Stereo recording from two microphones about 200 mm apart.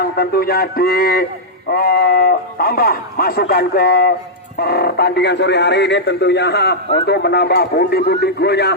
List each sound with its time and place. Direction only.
0.0 s speech: 50° left (ahead or behind)